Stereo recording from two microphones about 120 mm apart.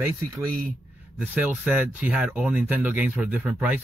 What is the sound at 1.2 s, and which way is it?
Speech, 10° right (ahead or behind).